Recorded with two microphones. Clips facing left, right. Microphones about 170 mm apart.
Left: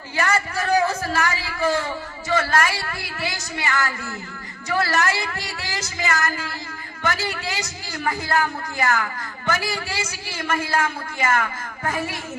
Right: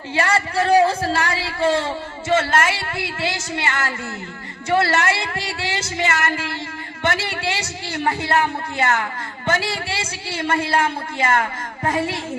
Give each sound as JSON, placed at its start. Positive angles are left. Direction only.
{"t": 0.1, "sound": "a woman's voice", "side_deg": -30}